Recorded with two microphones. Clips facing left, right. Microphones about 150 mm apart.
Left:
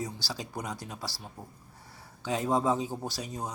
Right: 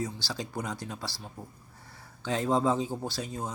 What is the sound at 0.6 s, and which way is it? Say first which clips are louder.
Speech: right 2 dB; 10° left (ahead or behind).